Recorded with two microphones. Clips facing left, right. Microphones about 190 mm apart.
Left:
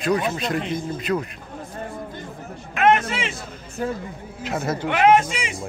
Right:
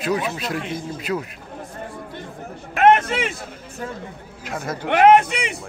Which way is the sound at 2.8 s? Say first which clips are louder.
Right 3 dB; 50° right (ahead or behind).